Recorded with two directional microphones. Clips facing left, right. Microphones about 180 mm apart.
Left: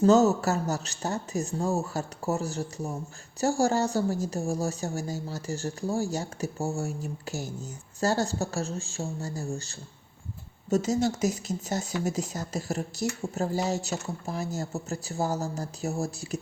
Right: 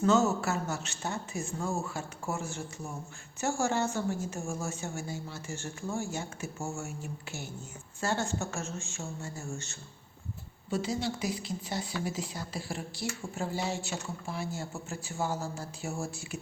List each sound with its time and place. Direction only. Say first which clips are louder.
0.0 s speech: left 6 dB; 40° left (ahead or behind)